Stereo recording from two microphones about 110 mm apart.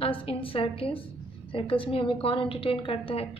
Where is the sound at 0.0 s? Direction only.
55° left (ahead or behind).